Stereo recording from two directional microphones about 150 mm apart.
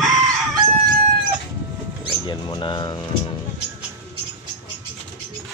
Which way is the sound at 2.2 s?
30° left (ahead or behind).